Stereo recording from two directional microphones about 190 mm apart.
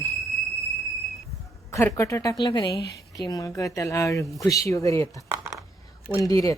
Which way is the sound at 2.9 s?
20° left (ahead or behind).